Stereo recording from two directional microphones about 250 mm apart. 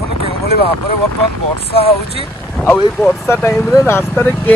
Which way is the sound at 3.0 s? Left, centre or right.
Centre.